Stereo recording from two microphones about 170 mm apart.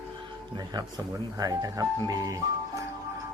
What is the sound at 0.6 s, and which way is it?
Speech, 25° right (ahead or behind).